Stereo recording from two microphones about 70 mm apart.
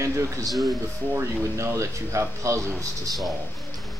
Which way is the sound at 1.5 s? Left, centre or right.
Right.